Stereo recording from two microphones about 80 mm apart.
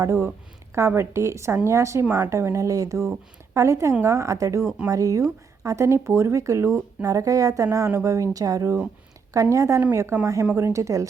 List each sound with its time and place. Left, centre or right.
0.0 s speech: right